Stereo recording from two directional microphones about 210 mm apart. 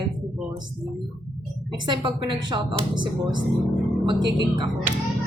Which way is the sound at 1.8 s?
20° right (ahead or behind).